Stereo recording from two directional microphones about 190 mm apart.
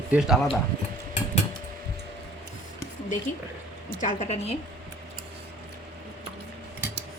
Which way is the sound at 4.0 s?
40° left (ahead or behind).